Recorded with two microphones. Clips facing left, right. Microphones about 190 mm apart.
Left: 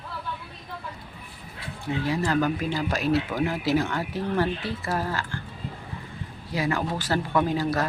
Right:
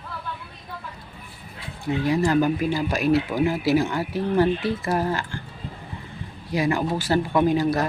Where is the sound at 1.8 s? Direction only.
15° right (ahead or behind).